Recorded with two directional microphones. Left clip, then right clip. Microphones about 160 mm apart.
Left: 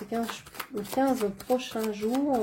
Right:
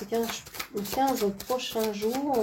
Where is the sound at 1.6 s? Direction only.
45° left (ahead or behind).